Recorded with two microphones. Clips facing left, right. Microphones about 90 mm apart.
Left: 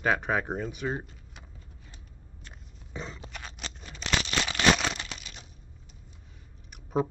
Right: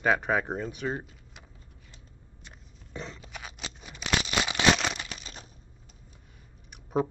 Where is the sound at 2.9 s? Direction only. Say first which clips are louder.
Even; 5° left (ahead or behind); by 4.6 s 10° right (ahead or behind).